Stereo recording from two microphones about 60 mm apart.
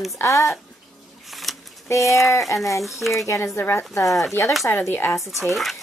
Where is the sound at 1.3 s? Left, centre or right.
Centre.